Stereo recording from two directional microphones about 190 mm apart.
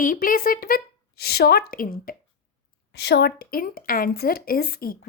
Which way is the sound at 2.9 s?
60° left (ahead or behind).